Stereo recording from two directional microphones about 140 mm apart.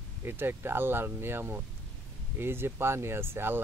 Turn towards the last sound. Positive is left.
turn(degrees=-15)  # may be behind; listen again after turning